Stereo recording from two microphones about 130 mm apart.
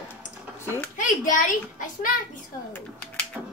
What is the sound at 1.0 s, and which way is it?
A child's voice, 80° left.